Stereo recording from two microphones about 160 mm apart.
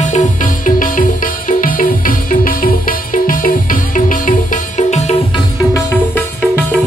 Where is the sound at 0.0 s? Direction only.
50° left (ahead or behind).